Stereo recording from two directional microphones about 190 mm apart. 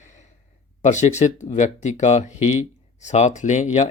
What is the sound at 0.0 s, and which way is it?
Sigh, 40° left (ahead or behind).